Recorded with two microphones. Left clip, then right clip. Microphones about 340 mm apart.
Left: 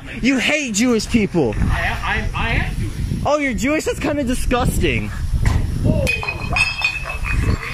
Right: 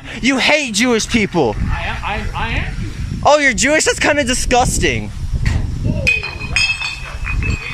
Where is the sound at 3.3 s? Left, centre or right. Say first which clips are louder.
Right 6 dB; right.